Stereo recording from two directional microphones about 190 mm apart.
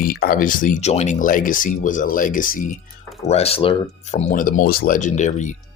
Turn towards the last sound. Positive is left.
turn(degrees=40)  # may be behind; listen again after turning